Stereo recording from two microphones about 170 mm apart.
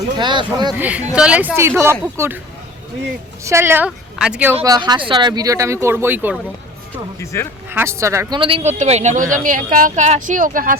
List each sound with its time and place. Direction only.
0.2 s speech: 25° right (ahead or behind)
0.8 s speech: 10° right (ahead or behind)
3.4 s speech: 15° right (ahead or behind)
4.6 s speech: 25° right (ahead or behind)
7.7 s speech: 15° right (ahead or behind)
8.4 s a woman's voice: 35° right (ahead or behind); by 10.8 s 55° right (ahead or behind)